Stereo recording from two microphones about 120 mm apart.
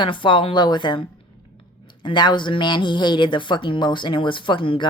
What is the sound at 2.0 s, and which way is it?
A woman's voice, 40° left (ahead or behind).